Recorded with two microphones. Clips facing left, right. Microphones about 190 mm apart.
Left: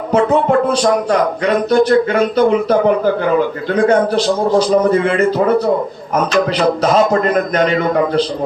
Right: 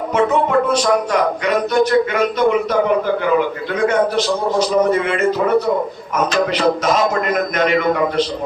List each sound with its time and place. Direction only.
0.1 s a man's voice: 30° left (ahead or behind)
6.8 s a man's voice: 35° left (ahead or behind)